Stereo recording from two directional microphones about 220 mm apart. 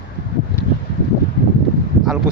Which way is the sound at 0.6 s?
10° left (ahead or behind).